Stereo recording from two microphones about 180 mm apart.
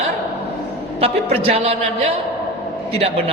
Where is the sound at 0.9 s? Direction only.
35° right (ahead or behind).